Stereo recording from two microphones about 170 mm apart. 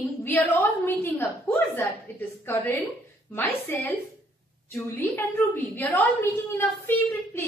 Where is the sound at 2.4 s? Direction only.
10° left (ahead or behind).